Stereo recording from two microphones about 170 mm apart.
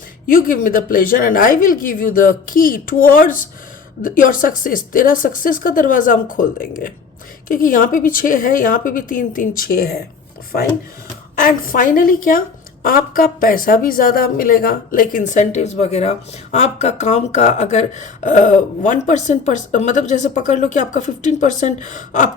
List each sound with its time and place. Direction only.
0.3 s a woman's voice: 55° left (ahead or behind)
11.3 s a woman's voice: 55° left (ahead or behind)